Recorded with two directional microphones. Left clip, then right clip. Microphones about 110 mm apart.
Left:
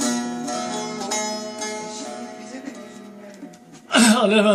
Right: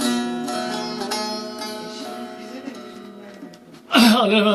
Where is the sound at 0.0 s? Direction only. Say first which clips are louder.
Right 2 dB; centre (ahead or behind).